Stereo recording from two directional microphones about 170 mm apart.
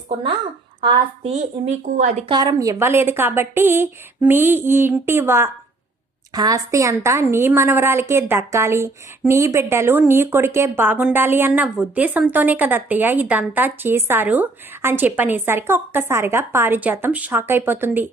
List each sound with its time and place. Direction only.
0.8 s speech: 35° right (ahead or behind)
2.3 s speech: 20° right (ahead or behind)